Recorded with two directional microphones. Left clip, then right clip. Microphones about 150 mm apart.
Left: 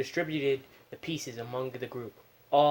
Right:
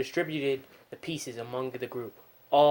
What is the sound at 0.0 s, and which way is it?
Speech, 25° right (ahead or behind).